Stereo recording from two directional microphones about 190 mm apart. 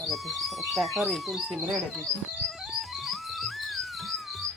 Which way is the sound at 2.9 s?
Centre (ahead or behind).